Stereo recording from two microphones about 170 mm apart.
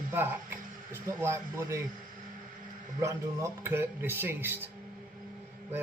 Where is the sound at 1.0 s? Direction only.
15° right (ahead or behind).